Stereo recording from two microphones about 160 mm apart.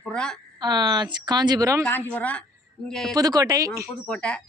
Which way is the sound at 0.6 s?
25° right (ahead or behind).